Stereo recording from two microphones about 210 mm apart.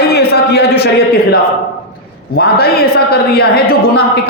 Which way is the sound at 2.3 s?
50° left (ahead or behind).